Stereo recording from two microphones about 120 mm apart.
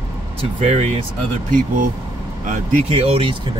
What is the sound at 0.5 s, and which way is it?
Speech, 60° right (ahead or behind).